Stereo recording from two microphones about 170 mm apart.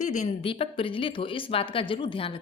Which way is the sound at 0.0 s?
45° left (ahead or behind).